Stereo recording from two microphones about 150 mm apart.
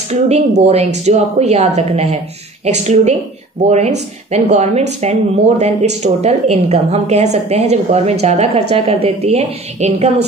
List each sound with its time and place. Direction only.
0.1 s speech: 45° right (ahead or behind)